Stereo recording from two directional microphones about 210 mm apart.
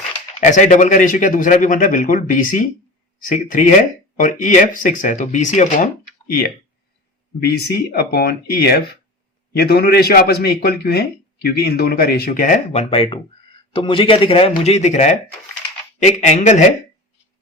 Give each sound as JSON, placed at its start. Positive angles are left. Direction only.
{"t": 0.3, "sound": "a man's voice", "side_deg": 35}